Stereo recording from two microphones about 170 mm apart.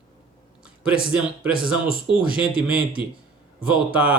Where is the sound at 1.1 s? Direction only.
5° right (ahead or behind).